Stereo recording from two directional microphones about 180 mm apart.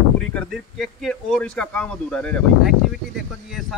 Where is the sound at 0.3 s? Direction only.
5° left (ahead or behind).